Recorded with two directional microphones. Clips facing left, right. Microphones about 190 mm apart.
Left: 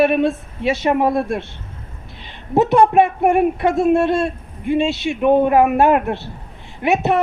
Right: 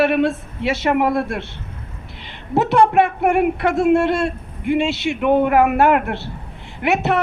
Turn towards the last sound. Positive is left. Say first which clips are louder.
# left 1 dB
turn(degrees=20)  # may be behind; listen again after turning